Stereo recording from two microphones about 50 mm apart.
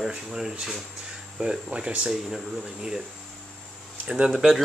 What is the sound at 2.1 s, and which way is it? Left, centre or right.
Speech, centre.